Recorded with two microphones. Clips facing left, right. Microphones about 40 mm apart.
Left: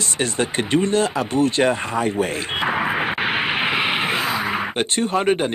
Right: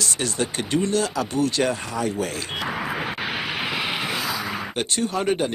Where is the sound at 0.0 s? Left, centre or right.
Left.